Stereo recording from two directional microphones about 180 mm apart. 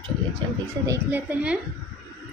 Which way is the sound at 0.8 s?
10° right (ahead or behind).